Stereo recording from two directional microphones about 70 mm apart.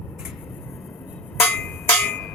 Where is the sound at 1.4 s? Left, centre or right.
Left.